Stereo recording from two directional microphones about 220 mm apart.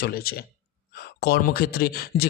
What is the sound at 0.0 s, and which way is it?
Speech, 45° left (ahead or behind).